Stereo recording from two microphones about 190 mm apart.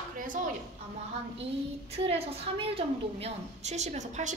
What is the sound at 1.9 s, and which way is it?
A woman's voice, 30° right (ahead or behind).